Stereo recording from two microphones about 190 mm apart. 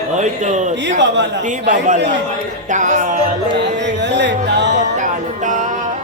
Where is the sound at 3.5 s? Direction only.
65° right (ahead or behind).